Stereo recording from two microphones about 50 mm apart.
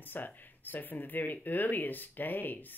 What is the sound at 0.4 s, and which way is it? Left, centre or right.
Speech, left.